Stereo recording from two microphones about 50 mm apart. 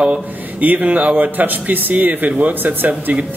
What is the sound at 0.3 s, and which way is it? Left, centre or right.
Speech, right.